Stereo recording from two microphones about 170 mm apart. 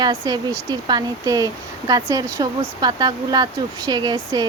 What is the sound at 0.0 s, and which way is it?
Speech, 25° right (ahead or behind).